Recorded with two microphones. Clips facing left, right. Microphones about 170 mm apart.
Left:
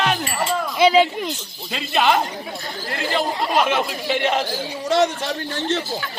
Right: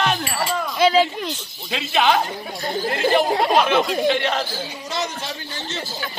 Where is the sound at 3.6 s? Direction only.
5° left (ahead or behind).